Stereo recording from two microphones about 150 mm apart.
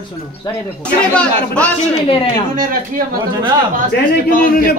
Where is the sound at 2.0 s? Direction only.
35° left (ahead or behind).